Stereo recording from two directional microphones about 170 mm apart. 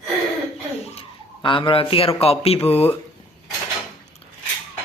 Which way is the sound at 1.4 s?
30° left (ahead or behind).